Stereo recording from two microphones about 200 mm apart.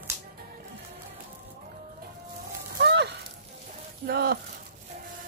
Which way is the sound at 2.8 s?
60° right (ahead or behind).